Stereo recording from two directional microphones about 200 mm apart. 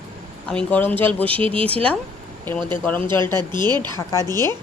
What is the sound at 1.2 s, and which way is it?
Speech, 25° right (ahead or behind).